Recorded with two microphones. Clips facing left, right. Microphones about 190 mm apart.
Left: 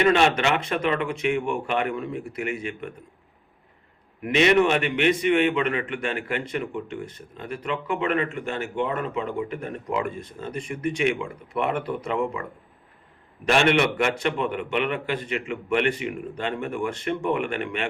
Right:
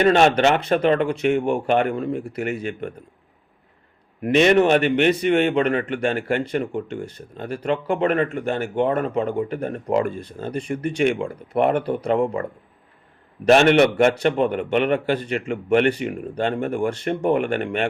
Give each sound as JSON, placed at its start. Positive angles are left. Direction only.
{"t": 0.1, "sound": "a man's voice", "side_deg": -40}
{"t": 4.2, "sound": "a man's voice", "side_deg": -40}
{"t": 13.4, "sound": "a man's voice", "side_deg": -40}